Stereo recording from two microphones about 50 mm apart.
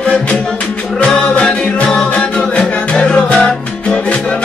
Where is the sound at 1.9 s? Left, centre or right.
Centre.